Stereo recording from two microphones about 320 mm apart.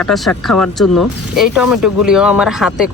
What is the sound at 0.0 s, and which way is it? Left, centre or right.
Speech, centre.